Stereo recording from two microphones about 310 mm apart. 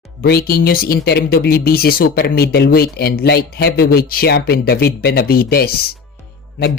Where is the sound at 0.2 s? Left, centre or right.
Left.